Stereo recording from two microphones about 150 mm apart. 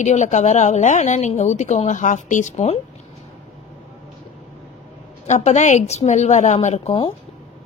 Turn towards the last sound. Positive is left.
turn(degrees=40)  # may be behind; listen again after turning